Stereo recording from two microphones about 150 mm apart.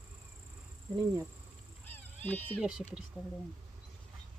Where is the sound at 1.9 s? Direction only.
10° left (ahead or behind).